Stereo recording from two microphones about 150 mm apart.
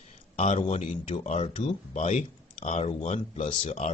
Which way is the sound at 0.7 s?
50° left (ahead or behind).